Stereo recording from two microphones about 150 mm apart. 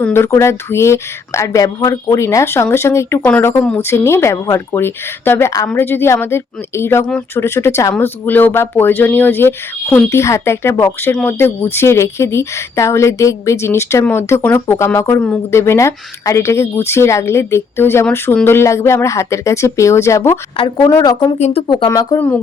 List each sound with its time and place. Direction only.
0.0 s speech: 15° left (ahead or behind)
21.3 s speech: 50° left (ahead or behind)
21.8 s speech: 20° left (ahead or behind)